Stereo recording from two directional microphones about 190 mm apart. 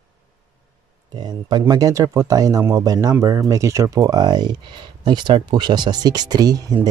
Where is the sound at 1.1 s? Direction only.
20° right (ahead or behind).